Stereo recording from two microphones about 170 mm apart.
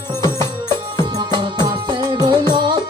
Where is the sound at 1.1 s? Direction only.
25° right (ahead or behind).